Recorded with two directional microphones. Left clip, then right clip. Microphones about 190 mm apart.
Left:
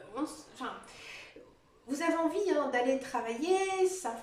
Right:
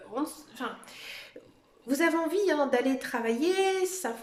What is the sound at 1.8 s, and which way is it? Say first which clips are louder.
A woman's voice: right 4 dB; 55° right (ahead or behind).